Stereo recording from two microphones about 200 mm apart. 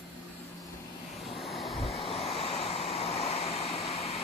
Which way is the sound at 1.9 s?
30° left (ahead or behind).